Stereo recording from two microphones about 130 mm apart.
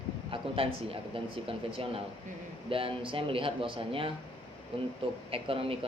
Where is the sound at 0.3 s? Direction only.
45° right (ahead or behind).